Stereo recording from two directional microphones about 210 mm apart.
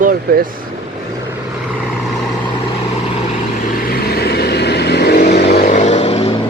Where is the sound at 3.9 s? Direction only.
50° left (ahead or behind); by 6.3 s 30° left (ahead or behind).